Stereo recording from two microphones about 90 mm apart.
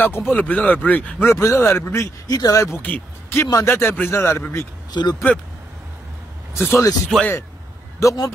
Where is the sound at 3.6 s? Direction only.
30° left (ahead or behind).